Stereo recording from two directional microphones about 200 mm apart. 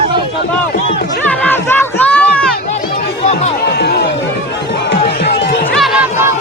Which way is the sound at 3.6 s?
55° left (ahead or behind).